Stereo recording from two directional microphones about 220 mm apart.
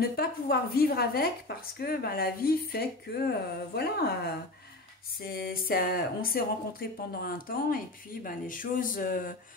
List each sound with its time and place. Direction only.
0.1 s a woman's voice: 45° left (ahead or behind)